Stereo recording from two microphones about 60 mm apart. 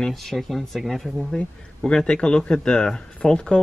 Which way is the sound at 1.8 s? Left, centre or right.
Centre.